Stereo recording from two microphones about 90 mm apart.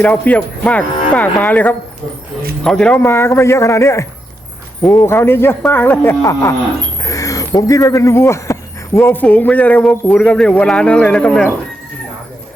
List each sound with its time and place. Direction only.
0.0 s speech: 15° left (ahead or behind)
3.0 s a man's voice: 25° left (ahead or behind)
7.0 s speech: 40° left (ahead or behind)
9.2 s speech: 15° left (ahead or behind)